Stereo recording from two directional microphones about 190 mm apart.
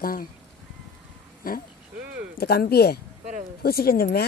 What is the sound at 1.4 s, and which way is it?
Speech, 45° left (ahead or behind).